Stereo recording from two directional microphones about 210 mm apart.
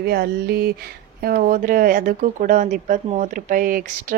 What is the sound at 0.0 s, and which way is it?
Speech, 50° right (ahead or behind).